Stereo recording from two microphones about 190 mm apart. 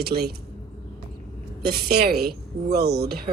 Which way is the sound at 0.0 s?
55° right (ahead or behind).